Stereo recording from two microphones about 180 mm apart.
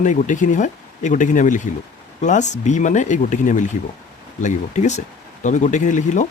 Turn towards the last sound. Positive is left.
turn(degrees=40)  # may be behind; listen again after turning